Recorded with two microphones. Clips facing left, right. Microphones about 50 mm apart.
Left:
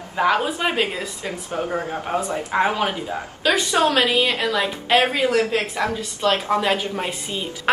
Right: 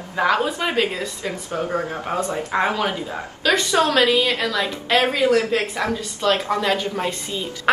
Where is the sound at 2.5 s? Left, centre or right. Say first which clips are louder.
Left 1 dB; centre.